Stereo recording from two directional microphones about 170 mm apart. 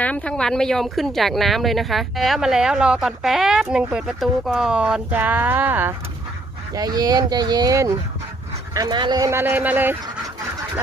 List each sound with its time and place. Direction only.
0.0 s speech: 5° left (ahead or behind); by 5.9 s 10° right (ahead or behind)
6.7 s a man's voice: 20° right (ahead or behind)